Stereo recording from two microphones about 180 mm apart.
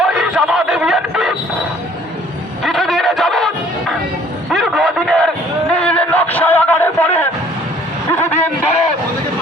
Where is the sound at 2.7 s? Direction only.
Centre (ahead or behind).